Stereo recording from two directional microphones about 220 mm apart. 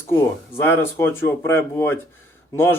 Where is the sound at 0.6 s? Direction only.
10° left (ahead or behind).